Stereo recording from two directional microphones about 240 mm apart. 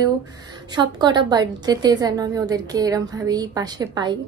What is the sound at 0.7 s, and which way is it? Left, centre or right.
A woman's voice, centre.